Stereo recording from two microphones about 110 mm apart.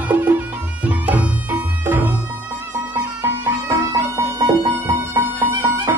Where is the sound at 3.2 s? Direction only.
20° right (ahead or behind).